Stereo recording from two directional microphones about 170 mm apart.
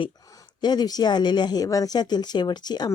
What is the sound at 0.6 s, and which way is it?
Speech, 25° left (ahead or behind).